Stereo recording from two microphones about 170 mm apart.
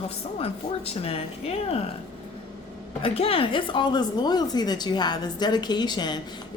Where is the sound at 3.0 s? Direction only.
35° left (ahead or behind).